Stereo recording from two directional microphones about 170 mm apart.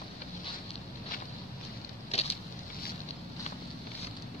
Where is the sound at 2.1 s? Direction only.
40° left (ahead or behind).